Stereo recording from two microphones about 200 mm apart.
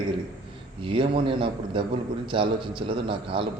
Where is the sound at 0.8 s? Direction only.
25° right (ahead or behind).